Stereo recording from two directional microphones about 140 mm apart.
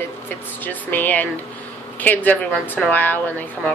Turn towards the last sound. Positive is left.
turn(degrees=10)  # may be behind; listen again after turning